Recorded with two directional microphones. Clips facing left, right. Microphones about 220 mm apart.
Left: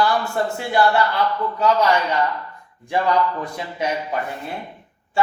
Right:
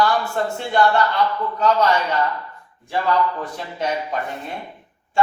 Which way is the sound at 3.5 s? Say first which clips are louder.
Even; 10° left (ahead or behind).